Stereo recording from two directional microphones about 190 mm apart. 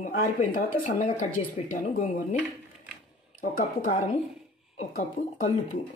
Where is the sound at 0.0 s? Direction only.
45° left (ahead or behind).